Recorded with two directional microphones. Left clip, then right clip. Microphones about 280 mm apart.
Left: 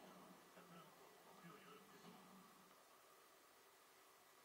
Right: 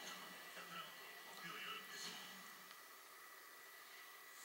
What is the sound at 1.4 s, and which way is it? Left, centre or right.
Television, centre.